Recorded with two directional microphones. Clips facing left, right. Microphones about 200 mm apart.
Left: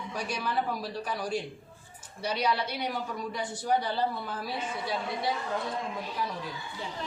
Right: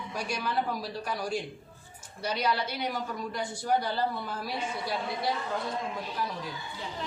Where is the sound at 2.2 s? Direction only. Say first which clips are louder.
Even; 10° left (ahead or behind).